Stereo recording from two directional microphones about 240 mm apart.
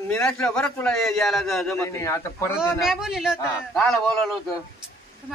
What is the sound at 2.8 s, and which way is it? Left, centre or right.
Speech, centre.